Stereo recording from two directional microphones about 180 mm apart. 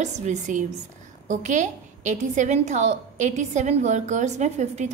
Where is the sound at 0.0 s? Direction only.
40° right (ahead or behind).